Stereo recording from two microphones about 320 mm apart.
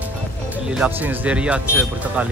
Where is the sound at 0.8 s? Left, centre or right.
Centre.